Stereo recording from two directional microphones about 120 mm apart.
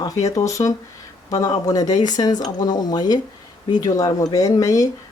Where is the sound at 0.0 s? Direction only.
30° left (ahead or behind).